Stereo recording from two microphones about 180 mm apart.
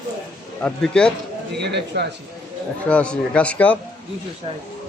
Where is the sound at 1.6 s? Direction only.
70° right (ahead or behind).